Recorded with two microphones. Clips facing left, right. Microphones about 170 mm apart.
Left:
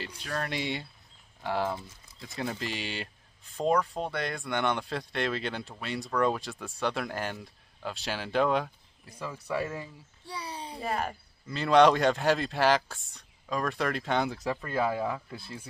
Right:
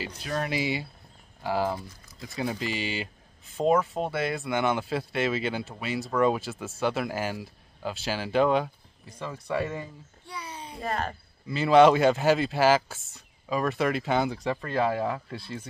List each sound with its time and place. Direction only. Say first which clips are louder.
0.0 s speech: right 4 dB; 5° right (ahead or behind)
10.2 s a sound: left 1 dB; 35° left (ahead or behind)
10.8 s speech: right 1 dB; 10° left (ahead or behind)
11.4 s speech: right 3 dB; centre (ahead or behind)